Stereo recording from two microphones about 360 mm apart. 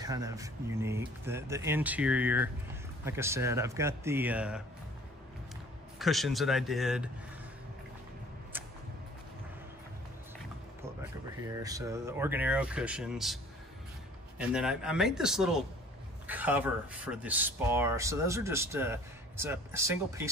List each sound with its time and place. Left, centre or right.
0.0 s speech: centre
5.9 s speech: centre
11.5 s speech: centre
14.5 s speech: centre